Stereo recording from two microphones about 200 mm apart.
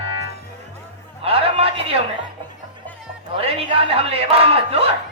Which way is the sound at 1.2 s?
30° right (ahead or behind).